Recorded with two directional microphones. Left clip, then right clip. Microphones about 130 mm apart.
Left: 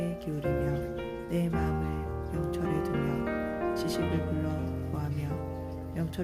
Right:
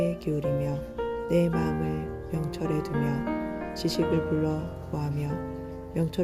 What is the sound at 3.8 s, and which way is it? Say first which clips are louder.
Speech: right 4 dB; 25° right (ahead or behind).